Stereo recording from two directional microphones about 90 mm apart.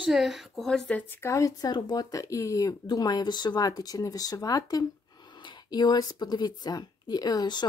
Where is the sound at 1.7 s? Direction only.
50° left (ahead or behind).